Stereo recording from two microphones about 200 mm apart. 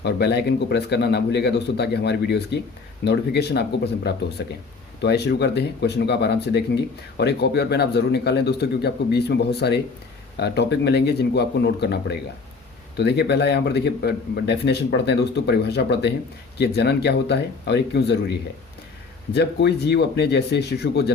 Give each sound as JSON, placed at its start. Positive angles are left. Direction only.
{"t": 0.0, "sound": "speech", "side_deg": 55}